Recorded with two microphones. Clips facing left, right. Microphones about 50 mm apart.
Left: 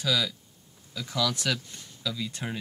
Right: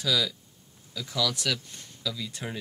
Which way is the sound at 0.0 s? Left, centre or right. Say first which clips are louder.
Even; centre.